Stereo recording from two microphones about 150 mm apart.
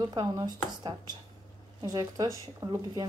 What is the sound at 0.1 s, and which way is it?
Speech, 25° right (ahead or behind).